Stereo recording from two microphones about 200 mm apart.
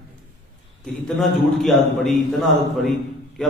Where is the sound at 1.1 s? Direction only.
Centre (ahead or behind).